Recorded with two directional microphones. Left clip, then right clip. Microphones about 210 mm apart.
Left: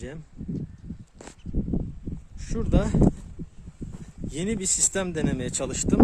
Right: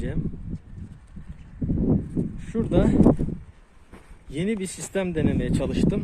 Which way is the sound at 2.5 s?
10° left (ahead or behind).